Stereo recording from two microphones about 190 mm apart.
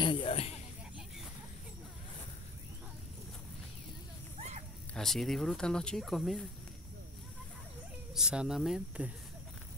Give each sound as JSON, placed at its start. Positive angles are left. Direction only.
{"t": 0.0, "sound": "a sound", "side_deg": 25}
{"t": 4.9, "sound": "speech", "side_deg": 0}
{"t": 8.1, "sound": "speech", "side_deg": -5}